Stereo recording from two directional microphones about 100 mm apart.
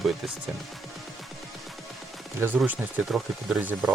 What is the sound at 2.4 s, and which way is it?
Speech, 20° right (ahead or behind).